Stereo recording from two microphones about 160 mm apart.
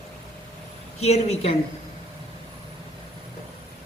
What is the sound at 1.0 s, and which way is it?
Speech, 40° left (ahead or behind).